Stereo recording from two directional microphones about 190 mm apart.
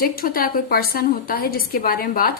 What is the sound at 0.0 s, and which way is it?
A woman's voice, 50° left (ahead or behind).